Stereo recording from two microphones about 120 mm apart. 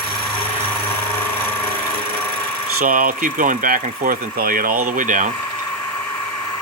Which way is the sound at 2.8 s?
90° right.